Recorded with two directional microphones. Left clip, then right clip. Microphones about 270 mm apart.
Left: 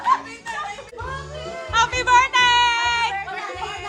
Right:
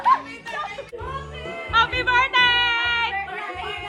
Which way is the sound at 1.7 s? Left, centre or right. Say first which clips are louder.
Left 2 dB; centre.